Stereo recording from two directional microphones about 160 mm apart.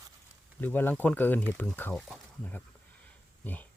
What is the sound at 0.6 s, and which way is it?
Speech, 10° left (ahead or behind).